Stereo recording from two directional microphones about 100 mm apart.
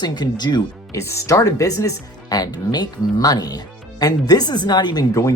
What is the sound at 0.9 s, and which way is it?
A woman's voice, 30° left (ahead or behind).